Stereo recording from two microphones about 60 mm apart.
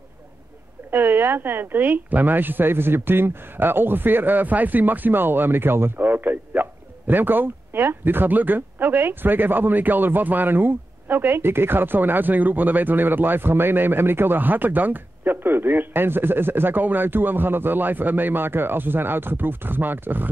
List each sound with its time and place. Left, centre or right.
0.9 s a woman's voice: right